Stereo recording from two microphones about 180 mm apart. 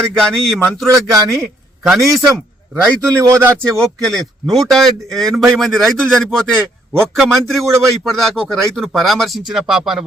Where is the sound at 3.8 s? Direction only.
Centre (ahead or behind).